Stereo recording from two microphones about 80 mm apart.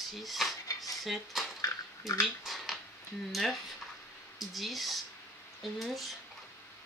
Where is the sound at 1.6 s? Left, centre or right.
Left.